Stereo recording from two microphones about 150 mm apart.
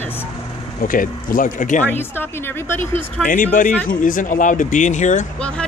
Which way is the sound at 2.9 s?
65° left (ahead or behind).